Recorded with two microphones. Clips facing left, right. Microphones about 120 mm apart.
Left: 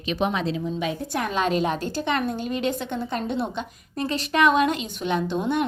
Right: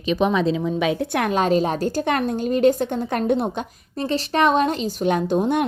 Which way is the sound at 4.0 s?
35° right (ahead or behind).